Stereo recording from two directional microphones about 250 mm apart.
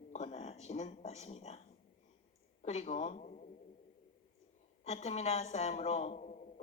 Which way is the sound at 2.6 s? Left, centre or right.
Left.